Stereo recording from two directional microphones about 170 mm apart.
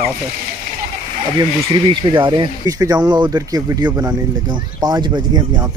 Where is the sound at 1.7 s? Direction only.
25° right (ahead or behind).